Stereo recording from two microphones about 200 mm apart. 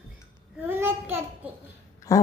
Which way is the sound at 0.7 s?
10° right (ahead or behind).